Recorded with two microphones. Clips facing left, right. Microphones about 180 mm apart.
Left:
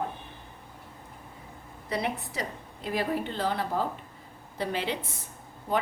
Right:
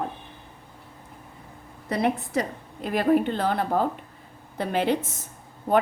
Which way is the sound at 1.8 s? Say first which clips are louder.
Right 6 dB; 55° right (ahead or behind).